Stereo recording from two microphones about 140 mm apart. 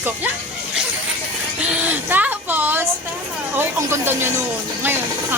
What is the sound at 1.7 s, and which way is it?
A woman's voice, 10° right (ahead or behind).